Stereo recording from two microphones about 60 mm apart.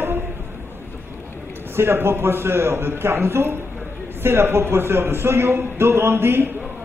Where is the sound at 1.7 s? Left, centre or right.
Right.